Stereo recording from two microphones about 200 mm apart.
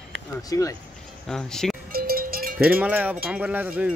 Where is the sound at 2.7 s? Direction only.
10° right (ahead or behind).